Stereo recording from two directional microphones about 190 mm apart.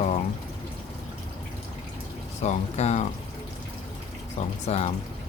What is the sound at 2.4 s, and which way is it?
Speech, 35° left (ahead or behind).